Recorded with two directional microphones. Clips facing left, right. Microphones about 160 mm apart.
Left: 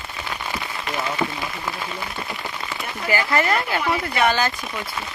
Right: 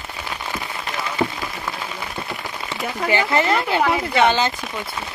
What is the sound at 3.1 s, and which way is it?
Speech, 25° right (ahead or behind).